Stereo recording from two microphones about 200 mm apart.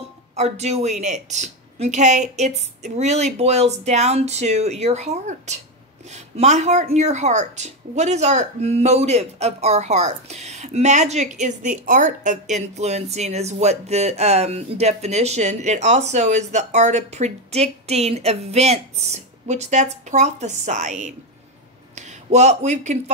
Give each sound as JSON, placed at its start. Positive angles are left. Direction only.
{"t": 0.4, "sound": "a woman's voice", "side_deg": -35}